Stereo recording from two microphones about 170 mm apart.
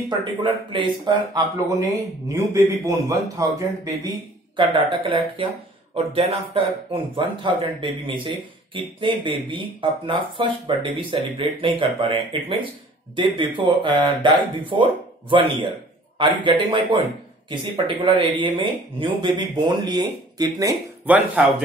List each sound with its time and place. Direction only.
0.2 s a man's voice: 30° right (ahead or behind)
4.6 s speech: 30° right (ahead or behind)
21.0 s a man's voice: 5° right (ahead or behind)